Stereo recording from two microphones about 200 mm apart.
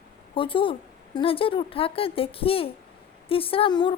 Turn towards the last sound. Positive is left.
turn(degrees=25)  # may be behind; listen again after turning